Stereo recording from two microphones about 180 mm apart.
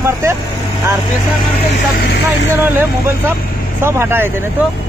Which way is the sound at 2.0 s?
60° left (ahead or behind).